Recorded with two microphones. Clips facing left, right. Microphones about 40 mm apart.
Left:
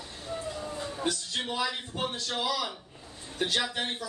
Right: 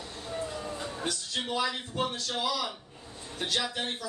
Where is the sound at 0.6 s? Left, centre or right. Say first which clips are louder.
Even; centre.